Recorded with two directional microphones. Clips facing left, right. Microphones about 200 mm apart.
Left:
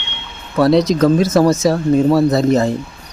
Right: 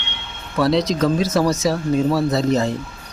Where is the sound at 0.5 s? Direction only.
50° left (ahead or behind).